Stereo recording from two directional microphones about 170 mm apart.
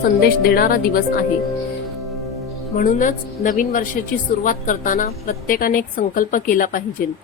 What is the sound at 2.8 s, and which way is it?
A woman's voice, 50° left (ahead or behind).